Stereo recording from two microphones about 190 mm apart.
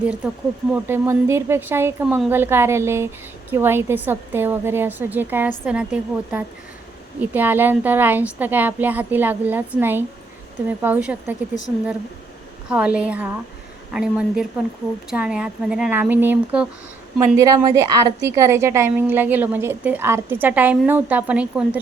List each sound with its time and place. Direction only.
0.7 s a woman's voice: 10° right (ahead or behind)
12.6 s a woman's voice: 5° right (ahead or behind)